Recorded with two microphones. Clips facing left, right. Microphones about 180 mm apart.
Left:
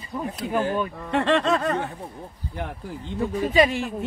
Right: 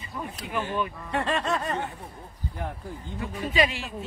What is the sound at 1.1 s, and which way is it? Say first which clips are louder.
Speech: left 6 dB; 90° left.